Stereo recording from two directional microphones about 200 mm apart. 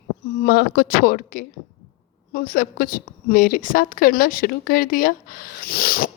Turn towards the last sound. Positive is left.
turn(degrees=50)  # may be behind; listen again after turning